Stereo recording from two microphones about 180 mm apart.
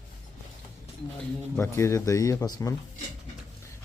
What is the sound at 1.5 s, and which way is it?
Speech, 15° left (ahead or behind).